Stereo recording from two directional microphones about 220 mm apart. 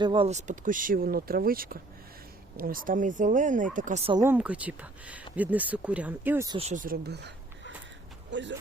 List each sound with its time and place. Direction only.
0.0 s speech: 25° right (ahead or behind)
4.2 s speech: 10° right (ahead or behind)
6.6 s speech: 35° right (ahead or behind); by 8.5 s 55° right (ahead or behind)